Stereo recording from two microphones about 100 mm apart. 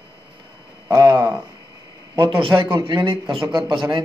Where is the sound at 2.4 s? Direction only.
60° right (ahead or behind).